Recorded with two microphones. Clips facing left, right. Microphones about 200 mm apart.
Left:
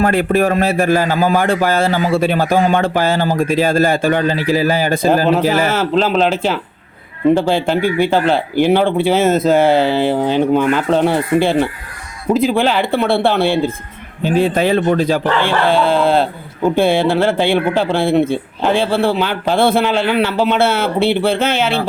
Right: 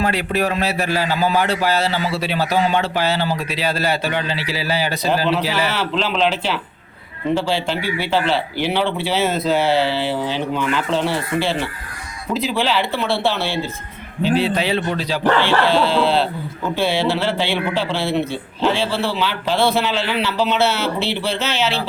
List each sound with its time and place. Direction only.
0.0 s a man's voice: 50° left (ahead or behind)